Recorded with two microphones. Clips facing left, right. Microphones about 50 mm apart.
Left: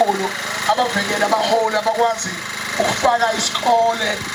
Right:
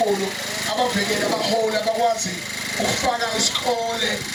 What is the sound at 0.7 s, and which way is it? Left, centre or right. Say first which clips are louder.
Speech: left 4 dB; left.